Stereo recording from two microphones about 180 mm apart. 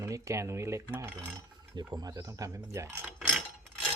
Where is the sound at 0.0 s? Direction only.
15° right (ahead or behind).